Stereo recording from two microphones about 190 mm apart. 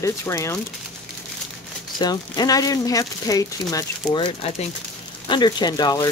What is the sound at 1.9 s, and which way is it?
Speech, 20° left (ahead or behind).